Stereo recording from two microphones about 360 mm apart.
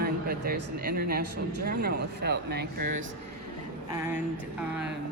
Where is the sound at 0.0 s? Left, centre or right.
Right.